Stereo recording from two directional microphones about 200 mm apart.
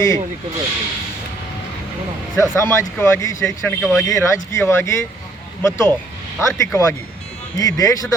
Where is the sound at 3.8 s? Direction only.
Centre (ahead or behind).